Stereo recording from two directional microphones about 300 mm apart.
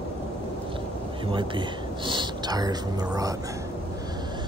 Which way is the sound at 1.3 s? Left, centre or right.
Centre.